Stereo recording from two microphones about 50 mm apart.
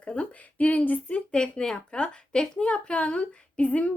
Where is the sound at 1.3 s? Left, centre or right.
Centre.